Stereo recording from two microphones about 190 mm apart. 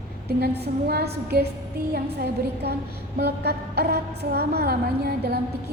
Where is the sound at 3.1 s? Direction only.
60° right (ahead or behind).